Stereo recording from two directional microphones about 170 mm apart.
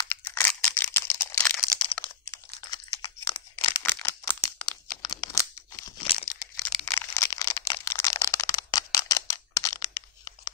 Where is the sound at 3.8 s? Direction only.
10° left (ahead or behind).